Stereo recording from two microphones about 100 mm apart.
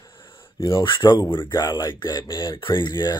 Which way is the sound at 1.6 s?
40° left (ahead or behind).